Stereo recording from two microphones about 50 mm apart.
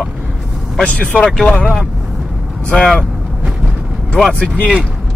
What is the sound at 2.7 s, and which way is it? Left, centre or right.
Speech, left.